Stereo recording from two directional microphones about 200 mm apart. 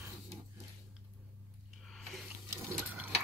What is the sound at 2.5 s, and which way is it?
Sewing machine, 15° right (ahead or behind).